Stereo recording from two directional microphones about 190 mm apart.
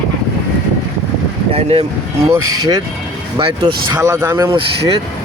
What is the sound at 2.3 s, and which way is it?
Speech, 15° right (ahead or behind).